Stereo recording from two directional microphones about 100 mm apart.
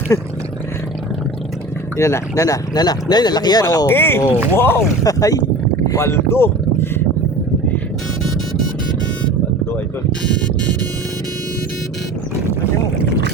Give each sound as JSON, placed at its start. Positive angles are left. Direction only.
{"t": 0.1, "sound": "speech", "side_deg": 35}
{"t": 2.0, "sound": "speech", "side_deg": 30}
{"t": 3.8, "sound": "speech", "side_deg": 20}
{"t": 5.0, "sound": "speech", "side_deg": 35}